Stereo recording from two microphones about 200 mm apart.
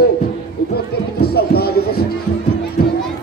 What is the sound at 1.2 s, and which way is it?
Music, 50° left (ahead or behind).